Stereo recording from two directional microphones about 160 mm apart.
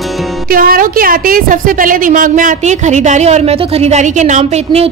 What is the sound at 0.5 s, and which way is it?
A woman's voice, 65° right (ahead or behind).